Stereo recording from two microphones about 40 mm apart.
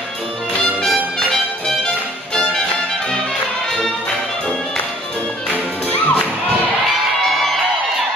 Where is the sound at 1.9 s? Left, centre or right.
Left.